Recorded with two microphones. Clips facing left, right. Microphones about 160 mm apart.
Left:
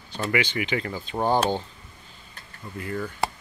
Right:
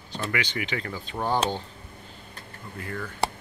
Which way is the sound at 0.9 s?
30° left (ahead or behind).